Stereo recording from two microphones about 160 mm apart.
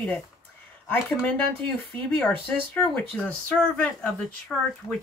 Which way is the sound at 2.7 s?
10° left (ahead or behind).